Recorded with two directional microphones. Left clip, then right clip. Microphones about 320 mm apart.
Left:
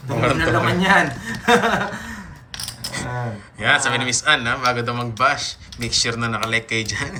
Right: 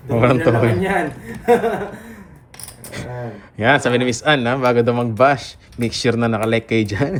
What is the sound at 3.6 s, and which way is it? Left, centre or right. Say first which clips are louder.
Speech: right 3 dB; centre.